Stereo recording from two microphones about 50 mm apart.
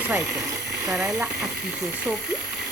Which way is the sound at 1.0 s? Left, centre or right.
Right.